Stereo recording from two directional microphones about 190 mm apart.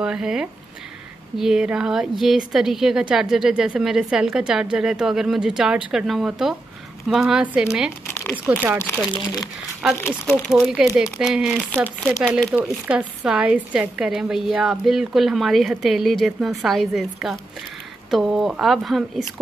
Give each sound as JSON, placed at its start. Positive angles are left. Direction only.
{"t": 0.0, "sound": "a woman's voice", "side_deg": -5}
{"t": 8.1, "sound": "crumpling", "side_deg": 10}
{"t": 9.1, "sound": "speech", "side_deg": 20}
{"t": 10.5, "sound": "a woman's voice", "side_deg": -5}